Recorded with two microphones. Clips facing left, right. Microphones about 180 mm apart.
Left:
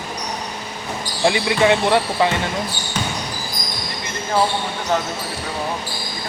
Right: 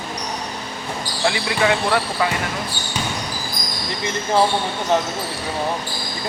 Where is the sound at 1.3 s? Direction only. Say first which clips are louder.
Left 4 dB; 20° left (ahead or behind).